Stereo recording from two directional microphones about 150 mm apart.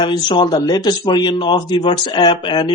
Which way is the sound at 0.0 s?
30° left (ahead or behind).